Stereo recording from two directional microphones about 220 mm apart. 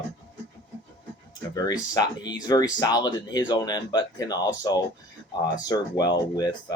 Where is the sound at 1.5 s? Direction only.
15° left (ahead or behind).